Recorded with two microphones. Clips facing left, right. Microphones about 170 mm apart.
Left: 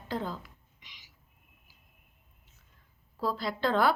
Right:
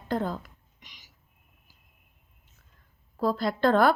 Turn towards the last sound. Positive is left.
turn(degrees=-50)  # may be behind; listen again after turning